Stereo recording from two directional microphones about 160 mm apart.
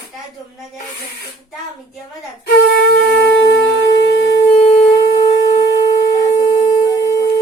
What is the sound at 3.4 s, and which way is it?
Shofar, 90° left.